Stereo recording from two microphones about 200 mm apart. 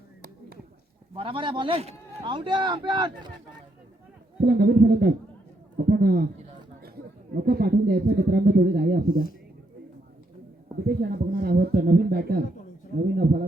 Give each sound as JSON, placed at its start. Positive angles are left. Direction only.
{"t": 1.1, "sound": "speech", "side_deg": -25}
{"t": 4.4, "sound": "a man's voice", "side_deg": -50}
{"t": 7.4, "sound": "speech", "side_deg": -50}
{"t": 10.8, "sound": "speech", "side_deg": -50}